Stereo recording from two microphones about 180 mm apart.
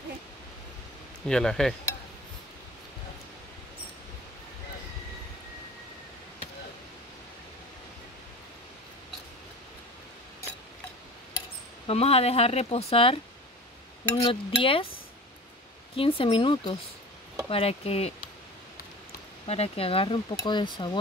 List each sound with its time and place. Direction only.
1.2 s speech: 5° left (ahead or behind)
11.9 s speech: 35° left (ahead or behind)
16.0 s speech: 30° left (ahead or behind)
19.4 s speech: 35° left (ahead or behind)